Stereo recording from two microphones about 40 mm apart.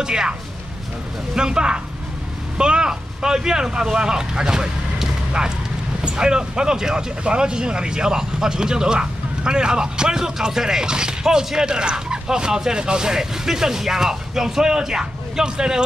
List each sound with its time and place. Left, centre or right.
0.0 s speech: centre